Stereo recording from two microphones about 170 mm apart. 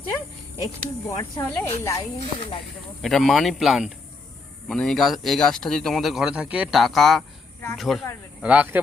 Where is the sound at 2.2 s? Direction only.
35° left (ahead or behind).